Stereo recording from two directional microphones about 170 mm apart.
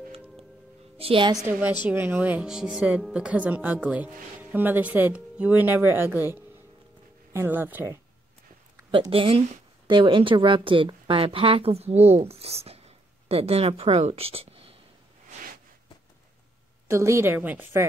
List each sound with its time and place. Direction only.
0.9 s a woman's voice: 35° right (ahead or behind)
1.9 s speech: 10° right (ahead or behind)
8.9 s speech: 30° right (ahead or behind)
16.8 s speech: 15° right (ahead or behind)